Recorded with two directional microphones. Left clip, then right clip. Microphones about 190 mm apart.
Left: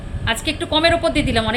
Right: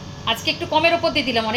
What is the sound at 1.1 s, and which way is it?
Speech, 70° left (ahead or behind).